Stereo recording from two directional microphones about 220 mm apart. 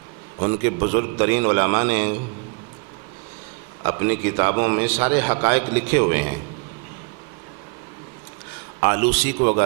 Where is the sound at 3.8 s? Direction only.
20° right (ahead or behind).